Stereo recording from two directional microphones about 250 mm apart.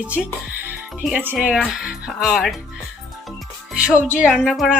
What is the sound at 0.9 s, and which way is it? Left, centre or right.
Speech, centre.